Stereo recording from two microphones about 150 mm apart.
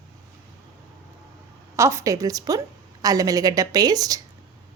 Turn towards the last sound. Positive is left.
turn(degrees=-25)  # may be behind; listen again after turning